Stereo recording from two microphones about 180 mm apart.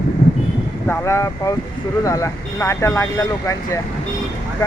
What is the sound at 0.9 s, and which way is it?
Speech, 15° left (ahead or behind).